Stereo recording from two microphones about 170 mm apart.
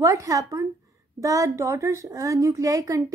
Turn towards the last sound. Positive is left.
turn(degrees=-20)  # may be behind; listen again after turning